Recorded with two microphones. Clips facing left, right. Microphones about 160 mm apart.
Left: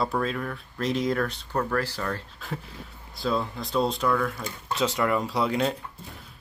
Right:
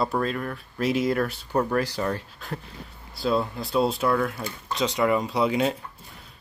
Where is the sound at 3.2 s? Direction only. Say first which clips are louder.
Right 3 dB; centre (ahead or behind).